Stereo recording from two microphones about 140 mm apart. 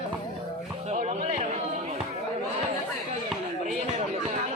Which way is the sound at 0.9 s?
55° right (ahead or behind).